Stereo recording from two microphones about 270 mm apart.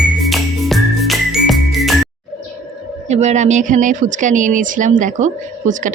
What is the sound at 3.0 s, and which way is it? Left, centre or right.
Speech, right.